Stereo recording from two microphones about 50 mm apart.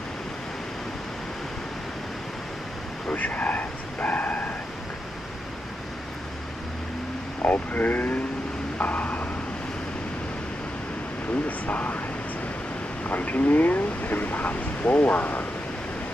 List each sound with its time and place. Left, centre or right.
3.1 s bow-wow: left
7.4 s speech: left
8.7 s vehicle: left
11.4 s speech: left
13.0 s speech: left